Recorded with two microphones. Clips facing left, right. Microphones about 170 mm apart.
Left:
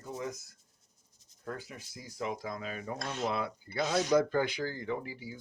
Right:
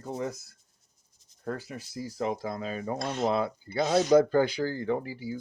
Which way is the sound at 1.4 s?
35° right (ahead or behind).